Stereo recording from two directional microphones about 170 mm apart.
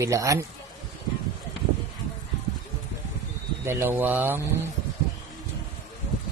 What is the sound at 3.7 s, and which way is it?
Speech, 15° right (ahead or behind).